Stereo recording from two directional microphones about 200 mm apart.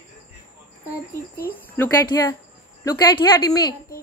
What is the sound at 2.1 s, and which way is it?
Speech, 20° left (ahead or behind).